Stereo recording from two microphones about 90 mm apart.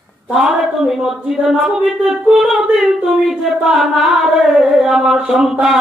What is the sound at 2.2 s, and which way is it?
Singing, 5° right (ahead or behind).